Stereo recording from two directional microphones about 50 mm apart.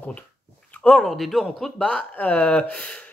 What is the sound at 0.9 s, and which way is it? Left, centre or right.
Speech, centre.